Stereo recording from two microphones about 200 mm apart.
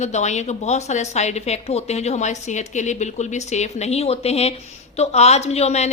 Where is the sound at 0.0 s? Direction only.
35° left (ahead or behind).